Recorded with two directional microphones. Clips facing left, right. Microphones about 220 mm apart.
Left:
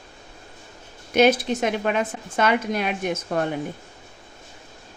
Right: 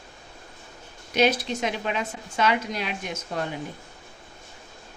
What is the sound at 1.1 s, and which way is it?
A woman's voice, 50° left (ahead or behind).